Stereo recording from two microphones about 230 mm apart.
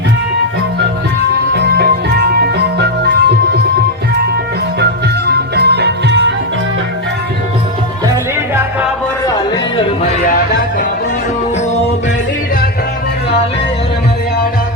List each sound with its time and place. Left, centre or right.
1.5 s music: right
4.8 s music: right
8.1 s music: centre
9.2 s music: centre
10.2 s music: left